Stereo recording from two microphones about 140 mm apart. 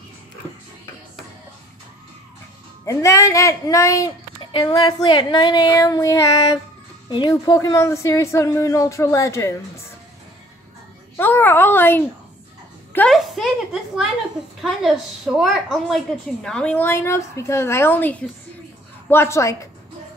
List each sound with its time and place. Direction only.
2.8 s speech: 20° left (ahead or behind)
4.5 s speech: 35° left (ahead or behind); by 9.6 s 20° left (ahead or behind)
11.1 s a woman's voice: 15° left (ahead or behind)
13.1 s a sound: centre (ahead or behind)
14.6 s a woman's voice: centre (ahead or behind); by 19.7 s 20° left (ahead or behind)